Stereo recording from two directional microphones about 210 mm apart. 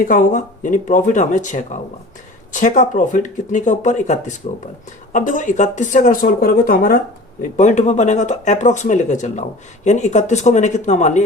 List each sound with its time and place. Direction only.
0.0 s speech: 40° left (ahead or behind)